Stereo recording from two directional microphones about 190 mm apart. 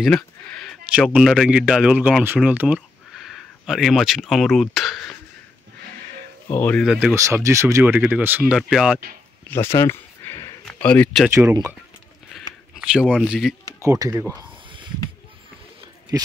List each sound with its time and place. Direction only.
0.0 s speech: 5° left (ahead or behind)
6.5 s speech: 5° left (ahead or behind)
7.2 s speech: 15° right (ahead or behind)
9.5 s a sound: 15° left (ahead or behind)
10.6 s speech: 5° left (ahead or behind)
12.7 s speech: 5° right (ahead or behind)
13.8 s speech: 20° right (ahead or behind)